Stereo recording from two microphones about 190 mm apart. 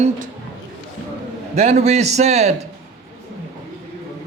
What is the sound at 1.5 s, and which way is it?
Speech, 35° right (ahead or behind).